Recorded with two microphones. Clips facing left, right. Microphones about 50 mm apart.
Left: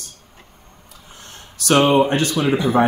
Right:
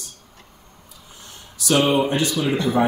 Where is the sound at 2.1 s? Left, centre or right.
Left.